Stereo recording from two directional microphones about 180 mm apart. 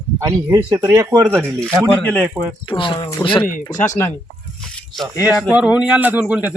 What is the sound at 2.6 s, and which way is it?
Speech, 30° left (ahead or behind).